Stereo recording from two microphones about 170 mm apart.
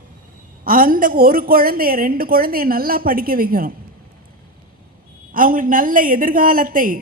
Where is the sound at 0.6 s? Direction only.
55° right (ahead or behind).